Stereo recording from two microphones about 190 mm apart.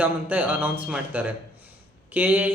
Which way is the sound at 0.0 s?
10° right (ahead or behind).